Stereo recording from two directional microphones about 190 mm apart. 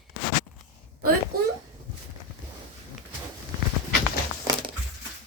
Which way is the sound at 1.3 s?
50° right (ahead or behind).